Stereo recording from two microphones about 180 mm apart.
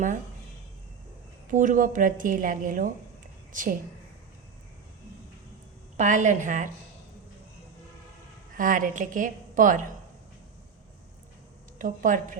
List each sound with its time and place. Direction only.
1.5 s a woman's voice: 45° right (ahead or behind)
6.0 s a woman's voice: 45° right (ahead or behind)
8.5 s a woman's voice: 50° right (ahead or behind)
11.8 s a woman's voice: 45° right (ahead or behind)